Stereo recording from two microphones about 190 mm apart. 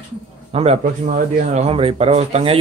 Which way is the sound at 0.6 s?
30° right (ahead or behind).